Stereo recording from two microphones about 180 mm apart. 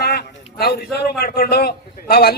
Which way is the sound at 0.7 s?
60° left (ahead or behind).